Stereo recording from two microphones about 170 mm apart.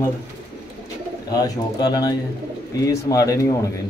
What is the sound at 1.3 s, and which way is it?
Speech, 20° left (ahead or behind).